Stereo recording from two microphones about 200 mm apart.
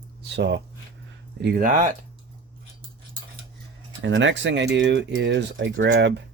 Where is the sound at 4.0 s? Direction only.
70° right (ahead or behind).